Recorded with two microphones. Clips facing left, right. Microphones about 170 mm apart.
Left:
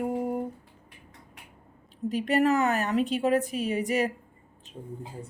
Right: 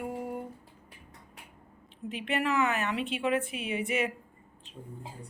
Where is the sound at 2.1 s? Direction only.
40° left (ahead or behind).